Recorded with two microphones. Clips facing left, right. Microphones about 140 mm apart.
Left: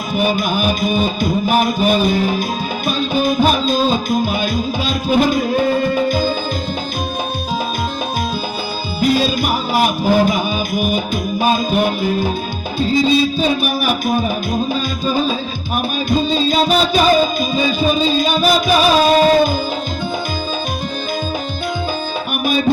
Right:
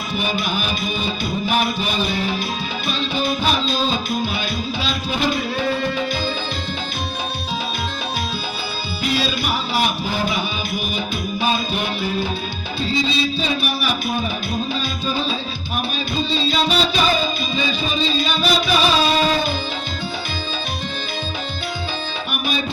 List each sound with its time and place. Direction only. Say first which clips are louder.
0.1 s music: left 7 dB; 45° left (ahead or behind)
9.0 s music: left 7 dB; 45° left (ahead or behind)